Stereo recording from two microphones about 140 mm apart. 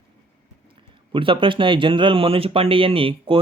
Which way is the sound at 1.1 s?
40° right (ahead or behind).